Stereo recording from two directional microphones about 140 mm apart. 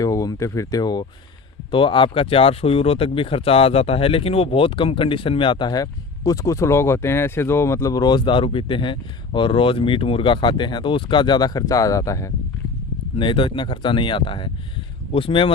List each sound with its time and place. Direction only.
0.0 s speech: 25° left (ahead or behind)
13.1 s speech: 35° left (ahead or behind)